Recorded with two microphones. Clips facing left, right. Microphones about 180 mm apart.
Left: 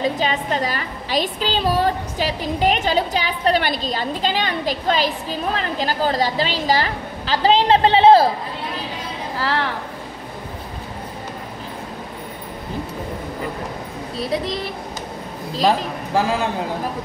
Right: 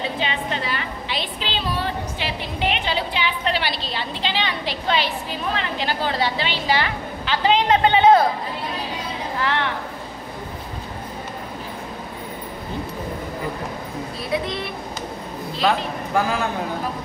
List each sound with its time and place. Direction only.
0.0 s a woman's voice: 40° left (ahead or behind)
9.4 s a sound: 35° left (ahead or behind)
14.3 s a woman's voice: 35° left (ahead or behind)